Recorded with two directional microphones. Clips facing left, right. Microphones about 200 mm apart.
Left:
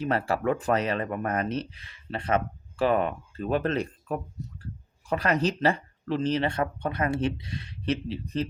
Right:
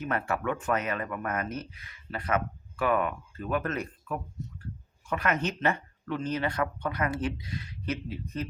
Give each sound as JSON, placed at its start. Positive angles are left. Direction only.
{"t": 0.0, "sound": "speech", "side_deg": 30}